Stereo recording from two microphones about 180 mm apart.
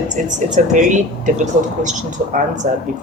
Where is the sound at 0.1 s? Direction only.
45° right (ahead or behind).